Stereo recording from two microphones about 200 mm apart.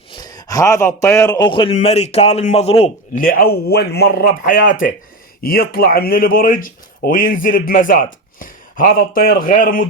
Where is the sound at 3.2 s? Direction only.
45° left (ahead or behind).